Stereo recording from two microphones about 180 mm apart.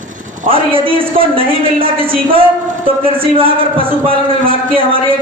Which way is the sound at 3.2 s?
30° right (ahead or behind).